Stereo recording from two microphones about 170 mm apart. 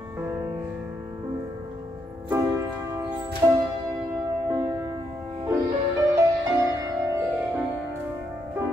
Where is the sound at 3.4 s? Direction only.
15° right (ahead or behind).